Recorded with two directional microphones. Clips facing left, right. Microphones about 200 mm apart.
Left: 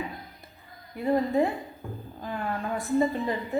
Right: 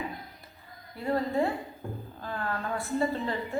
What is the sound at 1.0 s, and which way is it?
A woman's voice, 20° left (ahead or behind).